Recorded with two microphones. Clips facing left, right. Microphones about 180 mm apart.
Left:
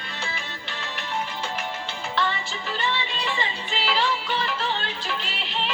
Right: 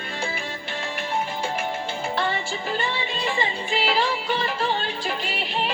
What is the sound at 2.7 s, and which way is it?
Music, 45° right (ahead or behind).